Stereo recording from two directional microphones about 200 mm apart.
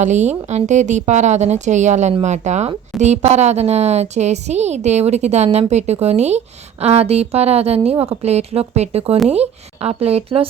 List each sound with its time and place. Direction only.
0.0 s a woman's voice: 35° right (ahead or behind)